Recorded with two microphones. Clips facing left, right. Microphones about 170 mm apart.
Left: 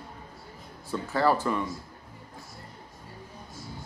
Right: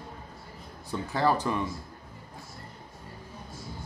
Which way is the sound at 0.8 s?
15° right (ahead or behind).